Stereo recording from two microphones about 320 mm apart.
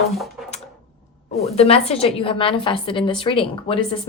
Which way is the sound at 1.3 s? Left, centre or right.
Centre.